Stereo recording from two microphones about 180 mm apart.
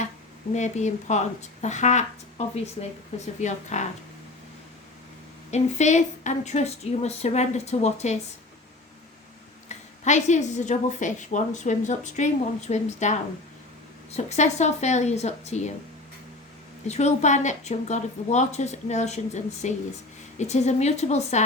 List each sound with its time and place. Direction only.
0.5 s speech: 40° left (ahead or behind)
5.5 s speech: 40° left (ahead or behind)
9.6 s speech: 40° left (ahead or behind)
16.8 s speech: 40° left (ahead or behind)